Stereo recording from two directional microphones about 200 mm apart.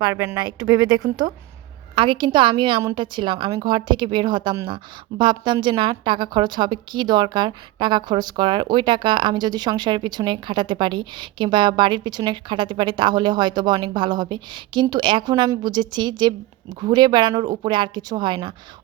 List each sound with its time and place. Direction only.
0.1 s a woman's voice: 15° right (ahead or behind)